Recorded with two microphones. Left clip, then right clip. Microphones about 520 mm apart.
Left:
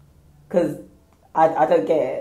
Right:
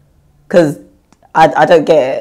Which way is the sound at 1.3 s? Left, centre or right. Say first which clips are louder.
Right 9 dB; right.